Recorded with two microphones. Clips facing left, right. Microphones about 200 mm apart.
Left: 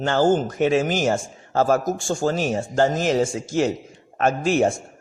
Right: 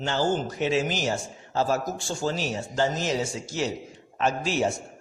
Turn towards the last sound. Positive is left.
turn(degrees=50)  # may be behind; listen again after turning